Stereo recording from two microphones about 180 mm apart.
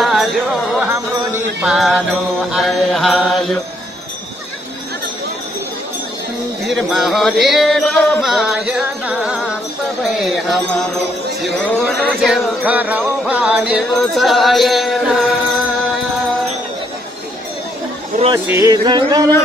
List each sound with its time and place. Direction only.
0.0 s music: centre (ahead or behind)
2.5 s mantra: centre (ahead or behind)
6.7 s music: centre (ahead or behind)
10.0 s speech: centre (ahead or behind)
11.4 s music: centre (ahead or behind)
18.1 s speech: 45° right (ahead or behind)
18.7 s music: 20° right (ahead or behind)